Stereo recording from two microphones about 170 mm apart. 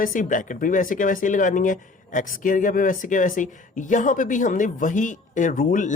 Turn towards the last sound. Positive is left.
turn(degrees=50)  # may be behind; listen again after turning